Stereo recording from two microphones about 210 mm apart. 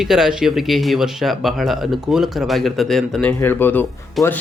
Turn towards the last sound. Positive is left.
turn(degrees=10)  # may be behind; listen again after turning